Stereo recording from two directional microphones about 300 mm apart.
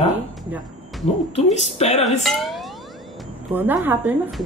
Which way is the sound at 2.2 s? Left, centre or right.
Centre.